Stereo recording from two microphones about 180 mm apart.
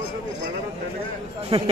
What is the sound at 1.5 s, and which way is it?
Speech, 30° right (ahead or behind).